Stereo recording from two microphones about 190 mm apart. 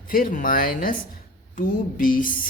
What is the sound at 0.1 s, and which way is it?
Speech, 50° left (ahead or behind).